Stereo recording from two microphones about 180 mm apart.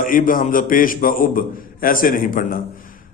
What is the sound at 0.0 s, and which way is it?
A man's voice, 50° left (ahead or behind).